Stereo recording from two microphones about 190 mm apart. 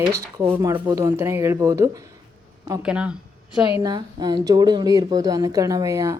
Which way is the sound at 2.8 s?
5° right (ahead or behind).